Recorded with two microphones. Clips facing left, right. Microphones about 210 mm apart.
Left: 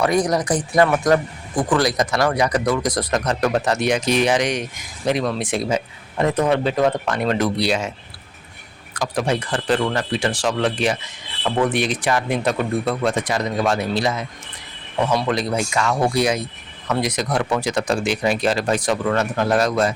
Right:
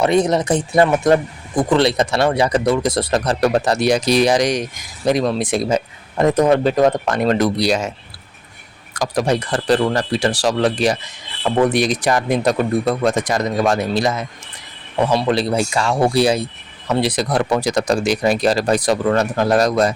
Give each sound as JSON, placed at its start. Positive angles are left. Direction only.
{"t": 0.0, "sound": "speech", "side_deg": -25}
{"t": 15.1, "sound": "speech", "side_deg": -30}